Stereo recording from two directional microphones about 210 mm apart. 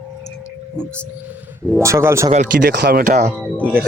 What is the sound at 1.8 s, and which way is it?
Speech, 15° right (ahead or behind).